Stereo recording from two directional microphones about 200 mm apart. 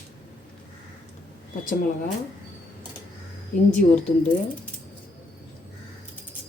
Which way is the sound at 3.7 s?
5° left (ahead or behind).